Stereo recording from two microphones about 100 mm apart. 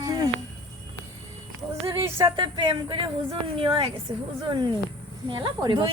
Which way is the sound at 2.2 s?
55° right (ahead or behind).